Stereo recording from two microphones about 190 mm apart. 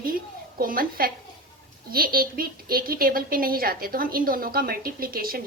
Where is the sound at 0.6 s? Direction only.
50° right (ahead or behind).